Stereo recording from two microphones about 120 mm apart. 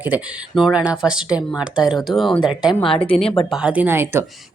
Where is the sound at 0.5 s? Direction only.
5° right (ahead or behind).